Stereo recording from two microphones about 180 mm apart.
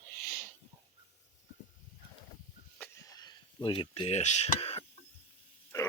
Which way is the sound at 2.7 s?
10° left (ahead or behind).